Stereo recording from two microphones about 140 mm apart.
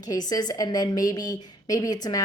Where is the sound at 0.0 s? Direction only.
25° left (ahead or behind).